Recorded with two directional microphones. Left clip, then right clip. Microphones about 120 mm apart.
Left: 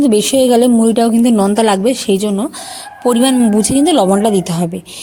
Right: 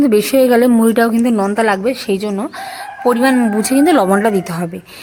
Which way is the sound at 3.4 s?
50° left (ahead or behind).